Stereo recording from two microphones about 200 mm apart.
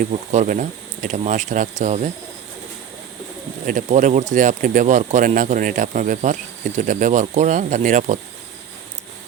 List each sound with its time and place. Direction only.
0.0 s speech: 40° right (ahead or behind)
3.7 s speech: 40° right (ahead or behind)